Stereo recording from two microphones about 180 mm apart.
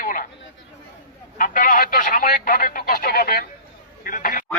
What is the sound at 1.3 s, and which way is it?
A man's voice, 50° left (ahead or behind).